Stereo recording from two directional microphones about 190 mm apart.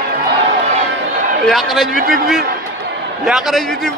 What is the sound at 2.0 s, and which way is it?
Speech, 50° right (ahead or behind).